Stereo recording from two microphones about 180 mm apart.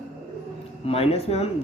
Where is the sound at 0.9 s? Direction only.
35° left (ahead or behind).